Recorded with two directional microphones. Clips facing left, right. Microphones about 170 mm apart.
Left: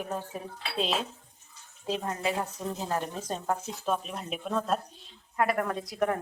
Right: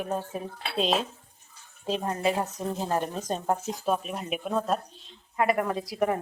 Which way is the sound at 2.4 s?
30° right (ahead or behind).